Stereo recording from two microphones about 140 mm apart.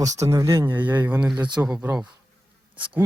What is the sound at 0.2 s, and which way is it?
Speech, 20° right (ahead or behind).